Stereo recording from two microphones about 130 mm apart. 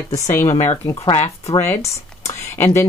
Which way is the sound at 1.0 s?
50° left (ahead or behind).